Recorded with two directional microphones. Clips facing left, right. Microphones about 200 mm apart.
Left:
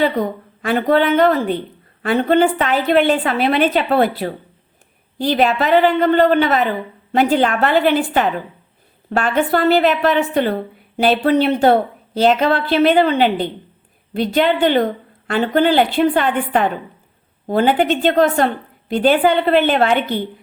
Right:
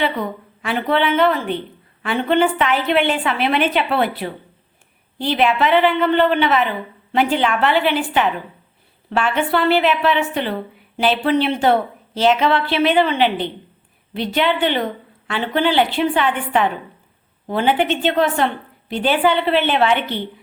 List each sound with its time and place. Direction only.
0.0 s a woman's voice: 40° left (ahead or behind)